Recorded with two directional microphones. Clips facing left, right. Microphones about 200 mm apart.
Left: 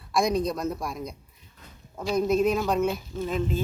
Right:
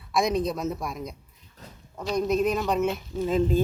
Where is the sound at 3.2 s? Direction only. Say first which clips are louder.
Right 6 dB; 25° right (ahead or behind).